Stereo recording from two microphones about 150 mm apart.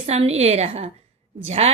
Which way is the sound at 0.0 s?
45° right (ahead or behind).